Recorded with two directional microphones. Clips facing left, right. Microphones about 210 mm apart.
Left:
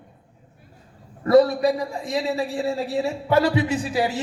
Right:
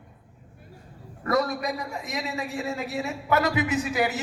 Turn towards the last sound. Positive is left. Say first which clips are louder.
# left 2 dB
turn(degrees=30)  # may be behind; listen again after turning